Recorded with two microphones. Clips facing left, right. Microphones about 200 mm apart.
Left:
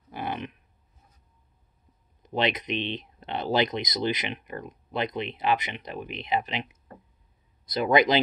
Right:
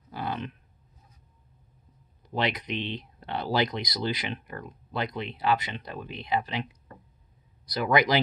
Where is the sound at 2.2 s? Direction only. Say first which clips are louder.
Left 2 dB; 20° left (ahead or behind).